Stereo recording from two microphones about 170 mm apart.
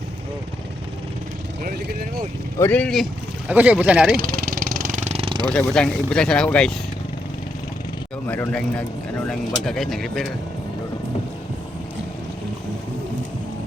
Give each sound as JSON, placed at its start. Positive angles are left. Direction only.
{"t": 2.6, "sound": "speech", "side_deg": 10}
{"t": 3.5, "sound": "speech", "side_deg": -10}
{"t": 4.2, "sound": "vehicle", "side_deg": -60}
{"t": 5.7, "sound": "speech", "side_deg": 5}
{"t": 8.3, "sound": "speech", "side_deg": 10}